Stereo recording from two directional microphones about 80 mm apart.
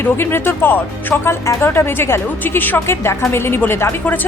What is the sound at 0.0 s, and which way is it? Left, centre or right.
Speech, left.